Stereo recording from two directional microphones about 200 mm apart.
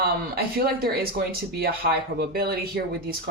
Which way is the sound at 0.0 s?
50° right (ahead or behind).